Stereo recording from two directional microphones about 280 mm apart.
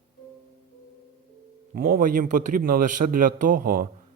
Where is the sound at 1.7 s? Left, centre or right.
Right.